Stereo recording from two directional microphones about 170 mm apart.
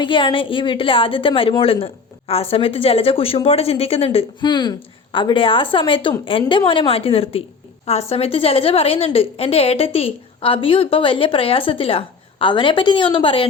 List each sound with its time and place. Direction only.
0.0 s a woman's voice: 30° left (ahead or behind)